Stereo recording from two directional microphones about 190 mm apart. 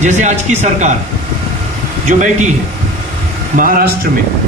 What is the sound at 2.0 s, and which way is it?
Speech, 40° right (ahead or behind).